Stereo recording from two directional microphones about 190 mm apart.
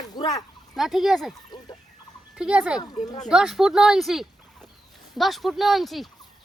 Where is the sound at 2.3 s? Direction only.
5° right (ahead or behind).